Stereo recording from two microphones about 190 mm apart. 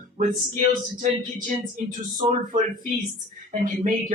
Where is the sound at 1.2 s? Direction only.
45° right (ahead or behind).